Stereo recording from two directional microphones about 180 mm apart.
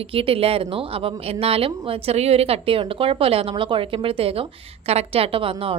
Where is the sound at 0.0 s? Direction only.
30° right (ahead or behind).